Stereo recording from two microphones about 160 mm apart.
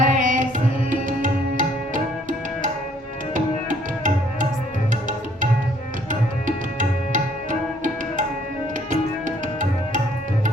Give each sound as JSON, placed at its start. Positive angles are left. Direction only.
{"t": 0.0, "sound": "music", "side_deg": -55}
{"t": 0.9, "sound": "tabla", "side_deg": -55}
{"t": 3.3, "sound": "music", "side_deg": -55}